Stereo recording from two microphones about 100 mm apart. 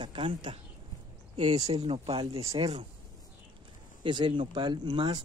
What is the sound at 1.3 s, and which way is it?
Speech, 90° right.